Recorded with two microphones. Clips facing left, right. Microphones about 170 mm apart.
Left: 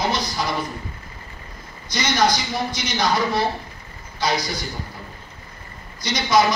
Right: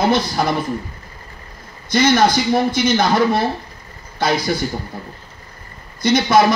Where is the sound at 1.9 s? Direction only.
55° right (ahead or behind).